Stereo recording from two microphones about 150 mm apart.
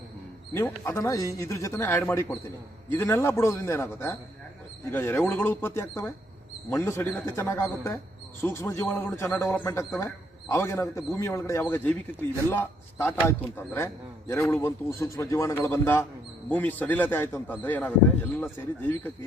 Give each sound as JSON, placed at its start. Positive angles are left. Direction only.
{"t": 0.5, "sound": "a man's voice", "side_deg": 20}